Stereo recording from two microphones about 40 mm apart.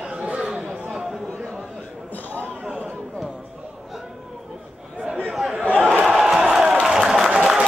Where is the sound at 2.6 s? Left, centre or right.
Right.